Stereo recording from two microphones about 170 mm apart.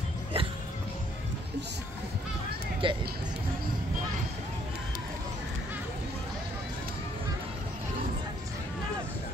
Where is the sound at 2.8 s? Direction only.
30° right (ahead or behind).